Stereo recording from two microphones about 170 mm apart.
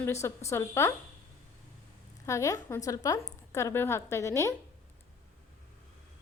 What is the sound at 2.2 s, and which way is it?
A woman's voice, 20° left (ahead or behind).